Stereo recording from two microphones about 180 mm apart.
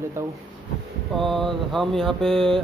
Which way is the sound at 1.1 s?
Centre (ahead or behind).